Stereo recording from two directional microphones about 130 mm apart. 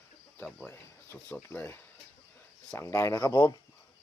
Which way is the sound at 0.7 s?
20° left (ahead or behind).